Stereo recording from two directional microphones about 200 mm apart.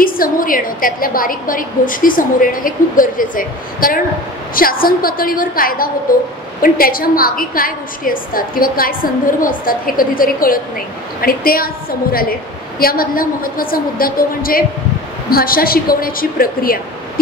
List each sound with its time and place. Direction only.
0.0 s a woman's voice: 45° left (ahead or behind)